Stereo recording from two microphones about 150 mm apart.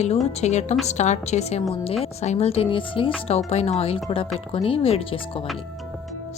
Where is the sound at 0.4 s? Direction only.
50° left (ahead or behind).